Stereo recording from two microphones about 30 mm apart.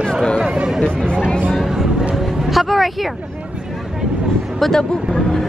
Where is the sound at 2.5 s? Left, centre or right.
Centre.